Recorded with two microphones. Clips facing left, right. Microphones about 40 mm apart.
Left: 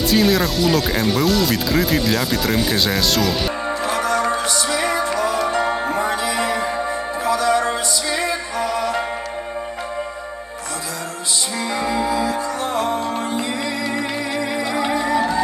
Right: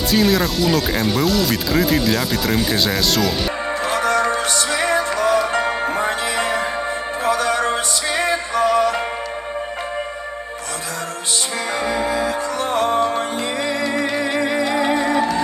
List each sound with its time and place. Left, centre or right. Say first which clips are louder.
0.1 s speech: right 1 dB; centre
3.8 s music: right 2 dB; right
11.8 s music: even; right